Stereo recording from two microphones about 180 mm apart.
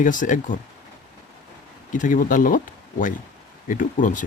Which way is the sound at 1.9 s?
50° left (ahead or behind).